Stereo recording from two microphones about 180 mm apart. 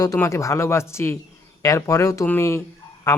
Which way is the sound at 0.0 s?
20° left (ahead or behind).